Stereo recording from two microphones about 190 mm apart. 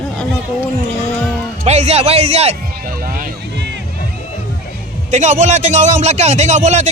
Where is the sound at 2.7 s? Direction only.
50° right (ahead or behind).